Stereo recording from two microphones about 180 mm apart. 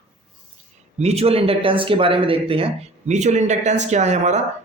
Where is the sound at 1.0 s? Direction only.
35° right (ahead or behind).